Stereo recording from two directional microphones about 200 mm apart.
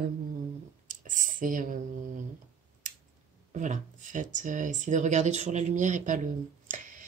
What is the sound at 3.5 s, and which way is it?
Speech, 35° right (ahead or behind).